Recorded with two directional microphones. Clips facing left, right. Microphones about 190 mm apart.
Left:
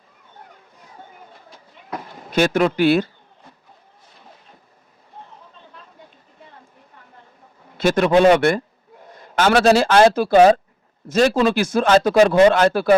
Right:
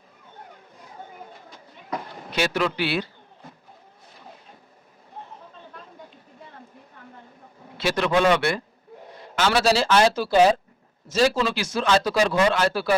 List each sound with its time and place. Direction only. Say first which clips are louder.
2.3 s speech: left 7 dB; 50° left (ahead or behind)
7.8 s a man's voice: left 7 dB; 50° left (ahead or behind)